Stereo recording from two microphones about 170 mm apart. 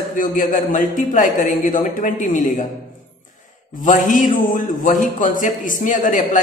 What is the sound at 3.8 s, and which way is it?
A woman's voice, 50° left (ahead or behind).